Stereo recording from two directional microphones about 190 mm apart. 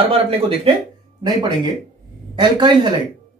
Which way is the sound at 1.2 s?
25° right (ahead or behind).